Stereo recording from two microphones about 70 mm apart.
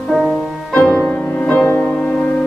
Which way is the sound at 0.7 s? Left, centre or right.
Centre.